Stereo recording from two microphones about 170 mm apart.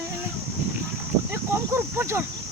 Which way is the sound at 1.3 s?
15° right (ahead or behind).